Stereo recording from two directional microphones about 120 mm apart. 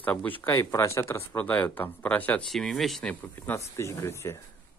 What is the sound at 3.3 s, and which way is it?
Speech, 20° left (ahead or behind).